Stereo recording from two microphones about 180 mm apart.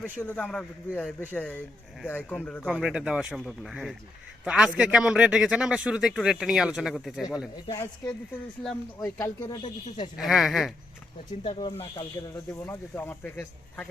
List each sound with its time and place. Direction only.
0.2 s speech: 10° left (ahead or behind)
2.6 s a man's voice: 5° right (ahead or behind)
7.5 s speech: 20° left (ahead or behind)
10.2 s a man's voice: centre (ahead or behind)
11.4 s speech: 35° left (ahead or behind)
12.5 s speech: 15° left (ahead or behind)